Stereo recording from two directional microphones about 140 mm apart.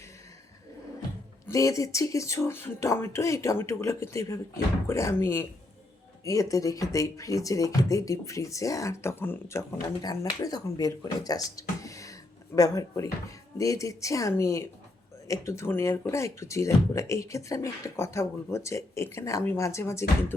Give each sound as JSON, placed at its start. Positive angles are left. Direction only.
{"t": 1.5, "sound": "speech", "side_deg": 20}